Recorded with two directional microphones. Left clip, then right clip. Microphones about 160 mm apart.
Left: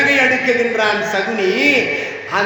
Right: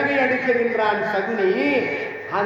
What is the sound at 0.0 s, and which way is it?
A man's voice, 10° left (ahead or behind).